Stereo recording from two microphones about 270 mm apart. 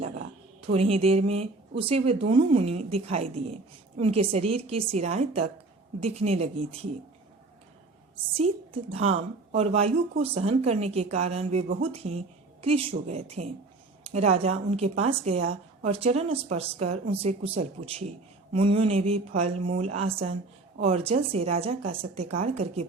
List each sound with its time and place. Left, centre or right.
0.0 s a sound: right
0.7 s a woman's voice: right
8.4 s a woman's voice: right